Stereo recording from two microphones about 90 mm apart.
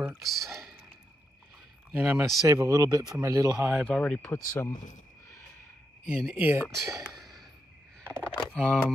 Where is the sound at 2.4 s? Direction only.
35° right (ahead or behind).